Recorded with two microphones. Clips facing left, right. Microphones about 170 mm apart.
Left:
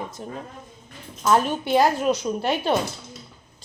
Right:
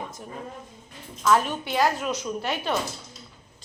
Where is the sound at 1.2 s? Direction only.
30° left (ahead or behind).